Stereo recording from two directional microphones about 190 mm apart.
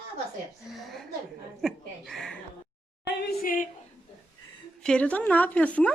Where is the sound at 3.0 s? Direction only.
50° left (ahead or behind).